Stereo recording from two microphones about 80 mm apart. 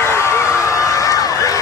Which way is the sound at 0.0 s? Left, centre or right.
Left.